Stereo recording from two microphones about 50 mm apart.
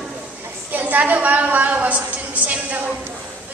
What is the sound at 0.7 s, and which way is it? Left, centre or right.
A woman's voice, right.